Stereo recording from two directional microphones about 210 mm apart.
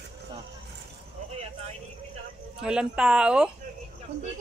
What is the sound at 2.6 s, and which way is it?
Speech, 5° right (ahead or behind).